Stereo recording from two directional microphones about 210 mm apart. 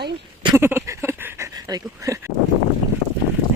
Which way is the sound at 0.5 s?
10° right (ahead or behind).